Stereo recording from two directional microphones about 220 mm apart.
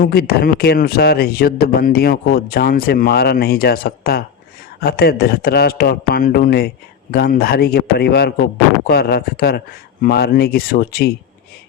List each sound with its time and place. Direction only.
0.0 s a man's voice: 45° left (ahead or behind)